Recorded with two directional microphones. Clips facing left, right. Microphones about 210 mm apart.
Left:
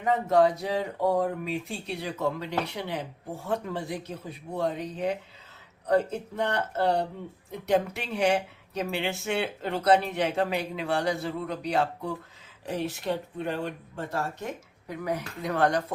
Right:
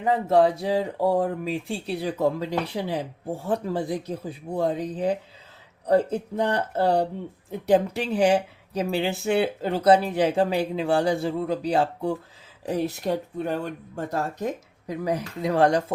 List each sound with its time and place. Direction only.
0.0 s speech: 30° right (ahead or behind)